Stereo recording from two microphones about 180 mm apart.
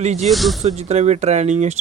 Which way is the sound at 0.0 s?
40° right (ahead or behind).